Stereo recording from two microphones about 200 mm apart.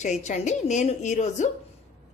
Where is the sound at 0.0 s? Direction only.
35° left (ahead or behind).